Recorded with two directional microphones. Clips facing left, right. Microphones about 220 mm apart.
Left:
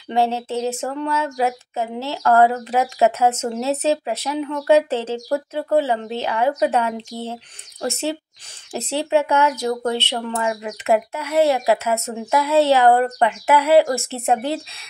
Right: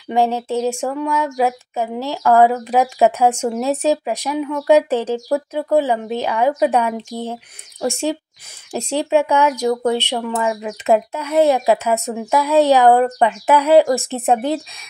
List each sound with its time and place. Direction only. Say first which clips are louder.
0.1 s speech: right 3 dB; 15° right (ahead or behind)